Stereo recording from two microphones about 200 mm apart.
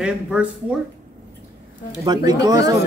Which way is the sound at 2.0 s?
20° right (ahead or behind).